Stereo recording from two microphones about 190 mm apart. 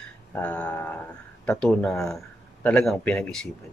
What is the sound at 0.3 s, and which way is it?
Speech, 5° left (ahead or behind).